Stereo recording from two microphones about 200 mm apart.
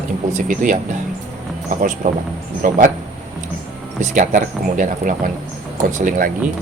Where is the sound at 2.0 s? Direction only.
40° right (ahead or behind).